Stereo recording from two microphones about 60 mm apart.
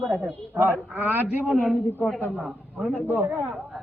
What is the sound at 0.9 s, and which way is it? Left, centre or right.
Speech, right.